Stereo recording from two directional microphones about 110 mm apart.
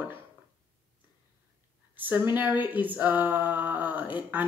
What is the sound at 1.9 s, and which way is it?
Speech, 20° right (ahead or behind).